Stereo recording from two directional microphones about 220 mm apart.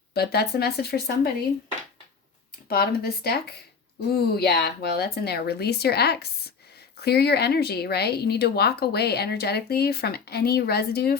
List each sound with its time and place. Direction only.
0.1 s speech: 45° left (ahead or behind)
2.6 s speech: 45° left (ahead or behind)